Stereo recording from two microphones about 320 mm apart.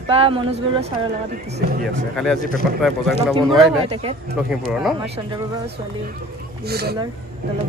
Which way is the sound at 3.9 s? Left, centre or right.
Centre.